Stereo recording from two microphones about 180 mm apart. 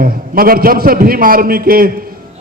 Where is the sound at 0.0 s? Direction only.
55° right (ahead or behind).